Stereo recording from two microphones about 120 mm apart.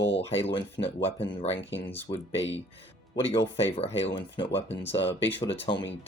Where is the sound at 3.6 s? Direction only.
55° left (ahead or behind).